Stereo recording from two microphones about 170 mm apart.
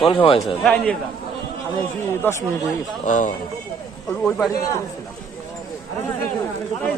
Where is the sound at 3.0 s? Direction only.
50° left (ahead or behind).